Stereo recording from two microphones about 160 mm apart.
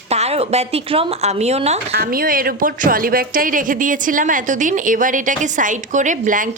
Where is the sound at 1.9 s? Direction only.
65° right (ahead or behind).